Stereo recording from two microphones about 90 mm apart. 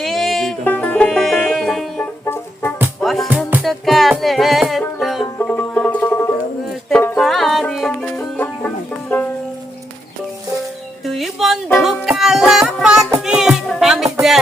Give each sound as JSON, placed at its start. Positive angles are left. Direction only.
{"t": 0.0, "sound": "music", "side_deg": 0}
{"t": 0.6, "sound": "music", "side_deg": 15}
{"t": 2.2, "sound": "music", "side_deg": 30}
{"t": 3.0, "sound": "music", "side_deg": 0}
{"t": 3.2, "sound": "music", "side_deg": -20}
{"t": 3.6, "sound": "music", "side_deg": 0}
{"t": 5.4, "sound": "banjo", "side_deg": 15}
{"t": 7.2, "sound": "music", "side_deg": 5}
{"t": 11.0, "sound": "music", "side_deg": 0}